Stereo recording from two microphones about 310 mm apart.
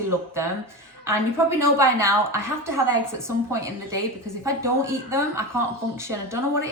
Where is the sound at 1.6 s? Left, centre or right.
Centre.